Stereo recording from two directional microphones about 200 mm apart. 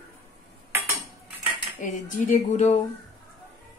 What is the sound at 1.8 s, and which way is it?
Speech, 40° left (ahead or behind).